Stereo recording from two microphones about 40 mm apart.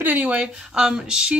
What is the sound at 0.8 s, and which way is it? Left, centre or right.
Speech, centre.